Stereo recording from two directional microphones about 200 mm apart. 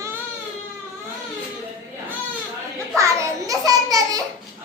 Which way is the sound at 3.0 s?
15° right (ahead or behind).